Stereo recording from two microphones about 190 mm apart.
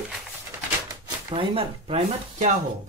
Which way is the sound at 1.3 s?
30° right (ahead or behind).